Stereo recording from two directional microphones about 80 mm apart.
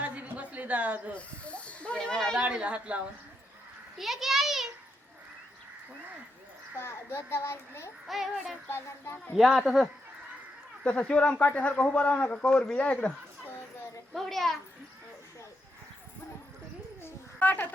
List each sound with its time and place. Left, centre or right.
0.0 s a sound: centre
1.1 s snake: centre
2.4 s speech: centre
3.9 s a child's voice: centre
6.7 s a child's voice: left
8.0 s a child's voice: centre
8.7 s speech: left
9.3 s a child's voice: centre
10.8 s a man's voice: centre
14.1 s a child's voice: centre
17.0 s a sound: left